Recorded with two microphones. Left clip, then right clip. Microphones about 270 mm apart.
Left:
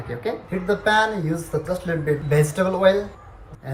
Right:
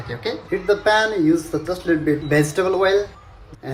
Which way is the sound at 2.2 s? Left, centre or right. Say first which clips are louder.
Right 1 dB; right.